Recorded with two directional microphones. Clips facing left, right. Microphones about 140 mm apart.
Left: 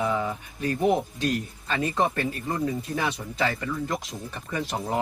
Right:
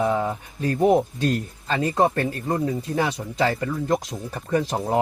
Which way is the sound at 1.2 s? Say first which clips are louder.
Right 3 dB; 30° right (ahead or behind).